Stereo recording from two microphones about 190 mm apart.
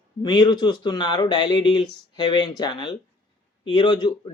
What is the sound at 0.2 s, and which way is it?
Speech, 25° left (ahead or behind).